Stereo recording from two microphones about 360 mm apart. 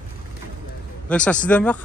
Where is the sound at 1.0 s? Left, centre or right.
Centre.